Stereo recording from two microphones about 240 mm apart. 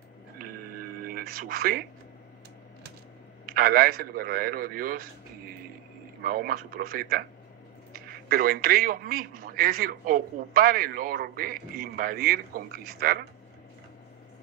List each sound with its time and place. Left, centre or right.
1.0 s speech: right
3.4 s a man's voice: right
6.2 s a man's voice: right